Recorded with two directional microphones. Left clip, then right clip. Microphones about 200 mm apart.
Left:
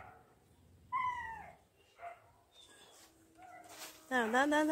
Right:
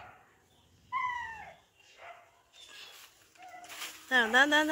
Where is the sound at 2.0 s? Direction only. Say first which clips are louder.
Left 1 dB; 55° left (ahead or behind).